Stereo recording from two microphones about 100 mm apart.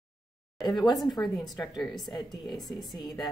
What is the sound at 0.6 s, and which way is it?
Speech, 45° left (ahead or behind).